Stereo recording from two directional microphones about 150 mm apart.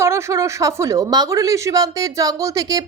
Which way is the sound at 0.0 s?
20° right (ahead or behind).